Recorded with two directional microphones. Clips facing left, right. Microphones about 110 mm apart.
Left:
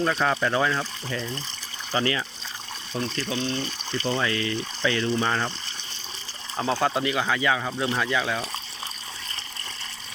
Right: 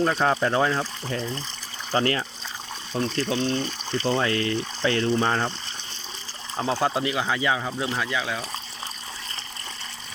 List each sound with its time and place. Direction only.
0.0 s speech: 30° right (ahead or behind)
1.9 s speech: 40° right (ahead or behind)
6.8 s speech: 20° right (ahead or behind)
7.6 s speech: 5° right (ahead or behind)